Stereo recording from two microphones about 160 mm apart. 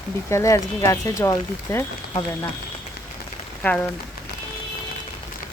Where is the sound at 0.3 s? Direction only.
20° left (ahead or behind).